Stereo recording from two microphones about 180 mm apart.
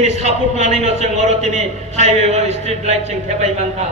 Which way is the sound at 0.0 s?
40° right (ahead or behind).